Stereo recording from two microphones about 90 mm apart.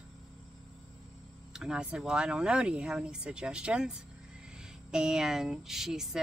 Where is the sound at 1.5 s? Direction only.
10° right (ahead or behind).